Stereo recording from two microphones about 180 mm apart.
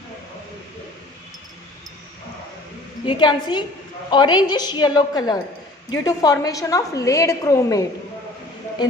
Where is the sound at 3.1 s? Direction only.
25° left (ahead or behind).